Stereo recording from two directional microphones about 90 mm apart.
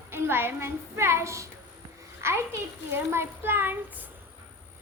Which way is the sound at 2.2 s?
30° right (ahead or behind).